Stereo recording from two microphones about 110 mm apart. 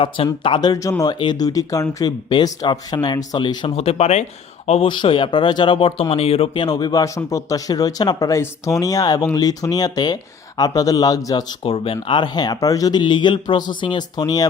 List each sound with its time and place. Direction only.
0.4 s speech: 45° left (ahead or behind); by 1.1 s 30° left (ahead or behind)
1.2 s speech: 40° left (ahead or behind)
3.8 s speech: 70° left (ahead or behind); by 4.8 s 85° left
4.8 s speech: 50° left (ahead or behind)
6.7 s speech: 40° left (ahead or behind)
11.6 s speech: 60° left (ahead or behind)
12.0 s speech: 45° left (ahead or behind)
13.0 s speech: 45° left (ahead or behind)